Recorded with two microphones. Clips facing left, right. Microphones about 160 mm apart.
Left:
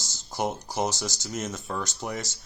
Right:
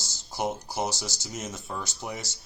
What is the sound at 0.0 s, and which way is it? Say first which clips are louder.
Speech: left 1 dB; 10° right (ahead or behind).